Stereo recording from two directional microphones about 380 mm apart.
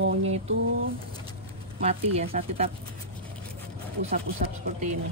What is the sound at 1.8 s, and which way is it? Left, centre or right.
Speech, centre.